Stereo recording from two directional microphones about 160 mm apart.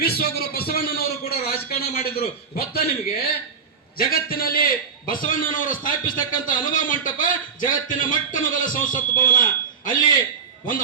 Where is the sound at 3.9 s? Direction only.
65° left (ahead or behind).